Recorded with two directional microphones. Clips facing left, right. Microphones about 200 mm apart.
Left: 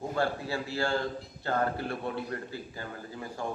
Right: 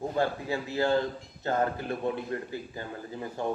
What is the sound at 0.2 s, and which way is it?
A man's voice, 20° right (ahead or behind).